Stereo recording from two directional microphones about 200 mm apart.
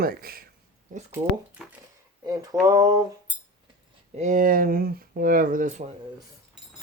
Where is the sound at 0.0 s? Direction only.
45° right (ahead or behind).